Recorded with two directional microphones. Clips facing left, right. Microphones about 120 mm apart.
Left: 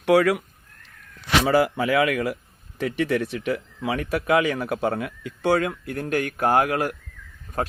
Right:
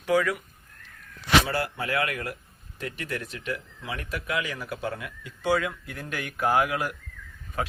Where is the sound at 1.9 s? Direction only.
90° left.